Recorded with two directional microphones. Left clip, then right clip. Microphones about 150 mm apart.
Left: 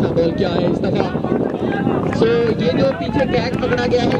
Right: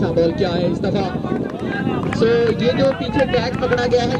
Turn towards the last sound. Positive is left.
turn(degrees=-5)  # may be behind; listen again after turning